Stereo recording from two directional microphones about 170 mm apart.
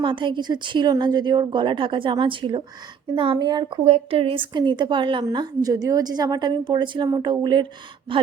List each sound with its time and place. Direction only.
0.0 s a woman's voice: 30° right (ahead or behind)